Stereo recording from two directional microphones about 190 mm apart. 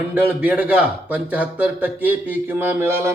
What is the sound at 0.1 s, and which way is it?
Speech, 10° right (ahead or behind).